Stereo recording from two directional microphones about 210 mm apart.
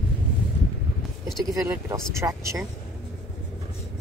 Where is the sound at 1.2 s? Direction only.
10° right (ahead or behind).